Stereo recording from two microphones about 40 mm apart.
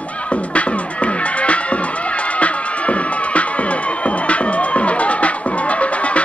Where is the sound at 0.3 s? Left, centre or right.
Left.